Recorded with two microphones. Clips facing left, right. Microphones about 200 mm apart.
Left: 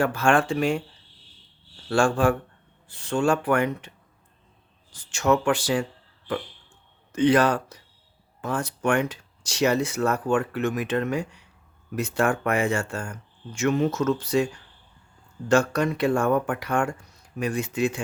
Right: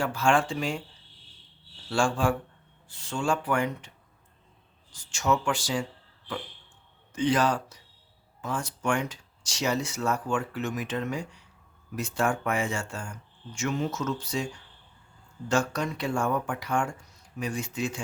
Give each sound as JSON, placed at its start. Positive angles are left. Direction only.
{"t": 0.0, "sound": "speech", "side_deg": 60}
{"t": 1.9, "sound": "speech", "side_deg": 60}
{"t": 7.1, "sound": "speech", "side_deg": 65}
{"t": 15.4, "sound": "speech", "side_deg": 60}